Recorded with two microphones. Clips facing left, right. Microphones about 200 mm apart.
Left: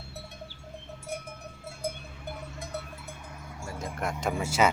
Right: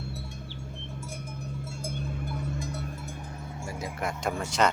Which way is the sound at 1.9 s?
50° right (ahead or behind).